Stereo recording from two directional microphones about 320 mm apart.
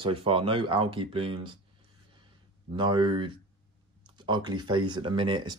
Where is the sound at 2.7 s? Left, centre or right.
Centre.